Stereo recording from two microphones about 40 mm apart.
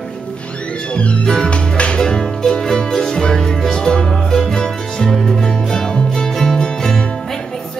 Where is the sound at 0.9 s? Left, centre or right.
Left.